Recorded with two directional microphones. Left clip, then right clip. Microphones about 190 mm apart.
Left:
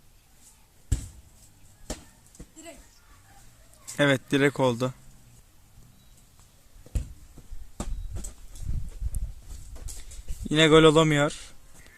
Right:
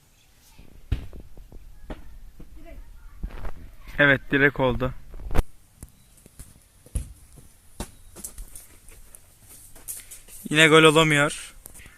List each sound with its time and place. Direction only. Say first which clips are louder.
3.9 s a man's voice: right 4 dB; 15° left (ahead or behind)
10.4 s a man's voice: right 2 dB; 5° left (ahead or behind)